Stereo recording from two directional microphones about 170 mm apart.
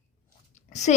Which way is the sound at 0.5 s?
45° left (ahead or behind).